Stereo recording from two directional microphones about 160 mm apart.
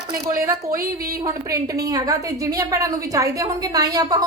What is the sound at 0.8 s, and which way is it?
Speech, 70° right (ahead or behind).